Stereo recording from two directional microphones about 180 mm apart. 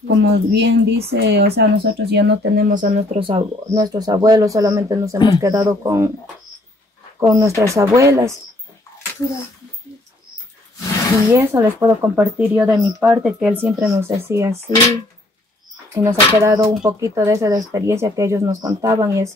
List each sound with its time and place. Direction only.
0.2 s speech: 70° right (ahead or behind); by 3.1 s 45° right (ahead or behind)
3.2 s speech: 30° right (ahead or behind)
7.2 s speech: 15° right (ahead or behind)
11.3 s speech: 15° right (ahead or behind)
15.9 s speech: 15° right (ahead or behind)